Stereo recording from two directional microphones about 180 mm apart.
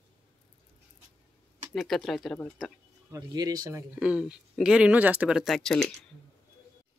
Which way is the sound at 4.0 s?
5° right (ahead or behind).